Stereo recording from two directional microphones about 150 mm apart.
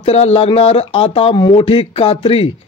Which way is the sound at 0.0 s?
45° left (ahead or behind).